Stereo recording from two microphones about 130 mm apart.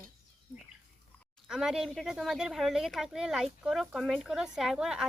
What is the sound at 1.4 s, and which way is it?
Speech, 5° right (ahead or behind).